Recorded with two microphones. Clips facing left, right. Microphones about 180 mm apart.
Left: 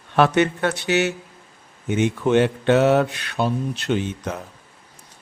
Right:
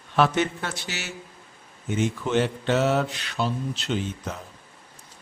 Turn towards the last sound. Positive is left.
turn(degrees=65)  # may be behind; listen again after turning